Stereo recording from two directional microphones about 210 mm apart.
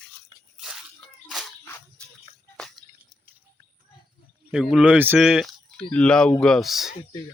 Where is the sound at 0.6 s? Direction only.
Centre (ahead or behind).